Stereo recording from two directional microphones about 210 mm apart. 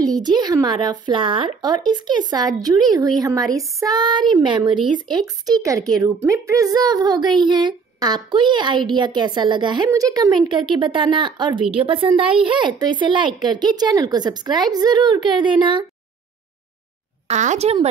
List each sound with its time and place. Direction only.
0.0 s a woman's voice: 20° right (ahead or behind)
17.3 s speech: 35° right (ahead or behind)